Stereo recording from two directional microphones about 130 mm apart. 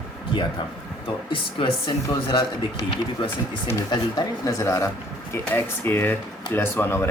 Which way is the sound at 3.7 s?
30° left (ahead or behind).